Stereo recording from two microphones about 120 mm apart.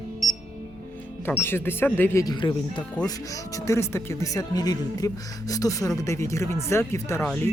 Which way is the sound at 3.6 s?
25° left (ahead or behind).